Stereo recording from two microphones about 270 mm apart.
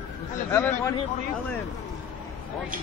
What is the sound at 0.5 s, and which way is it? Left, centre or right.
Speech, centre.